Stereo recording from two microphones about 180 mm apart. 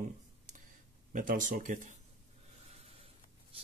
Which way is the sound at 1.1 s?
50° right (ahead or behind).